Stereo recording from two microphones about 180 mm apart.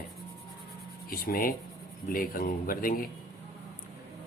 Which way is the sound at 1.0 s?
55° left (ahead or behind).